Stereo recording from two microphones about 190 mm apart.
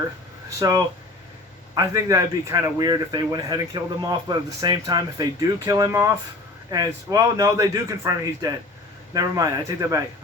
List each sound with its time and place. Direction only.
0.6 s a man's voice: 15° right (ahead or behind)